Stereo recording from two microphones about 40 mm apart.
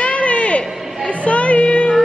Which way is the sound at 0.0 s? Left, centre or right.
Left.